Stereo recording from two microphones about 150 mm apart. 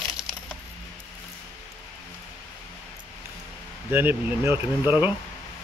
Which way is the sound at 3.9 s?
15° right (ahead or behind).